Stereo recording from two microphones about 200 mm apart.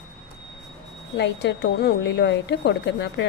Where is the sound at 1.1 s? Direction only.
60° left (ahead or behind).